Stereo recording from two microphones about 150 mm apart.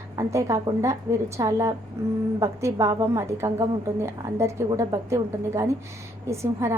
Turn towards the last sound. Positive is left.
turn(degrees=-20)  # may be behind; listen again after turning